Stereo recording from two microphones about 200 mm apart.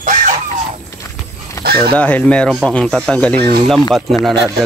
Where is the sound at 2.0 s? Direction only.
10° left (ahead or behind).